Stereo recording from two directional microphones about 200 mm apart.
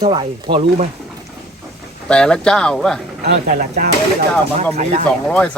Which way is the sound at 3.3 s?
50° right (ahead or behind).